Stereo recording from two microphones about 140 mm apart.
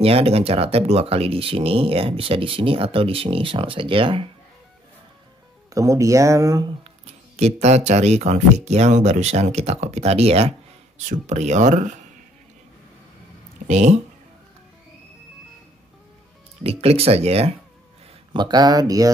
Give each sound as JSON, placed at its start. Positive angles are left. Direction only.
{"t": 0.0, "sound": "speech", "side_deg": -45}
{"t": 5.7, "sound": "speech", "side_deg": -25}
{"t": 7.3, "sound": "speech", "side_deg": -50}
{"t": 13.7, "sound": "speech", "side_deg": -55}
{"t": 16.6, "sound": "speech", "side_deg": -45}
{"t": 18.3, "sound": "speech", "side_deg": -30}